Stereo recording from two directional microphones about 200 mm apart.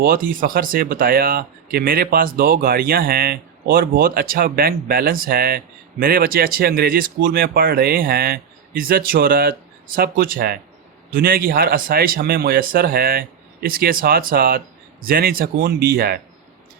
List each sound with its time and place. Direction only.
0.0 s speech: 45° right (ahead or behind)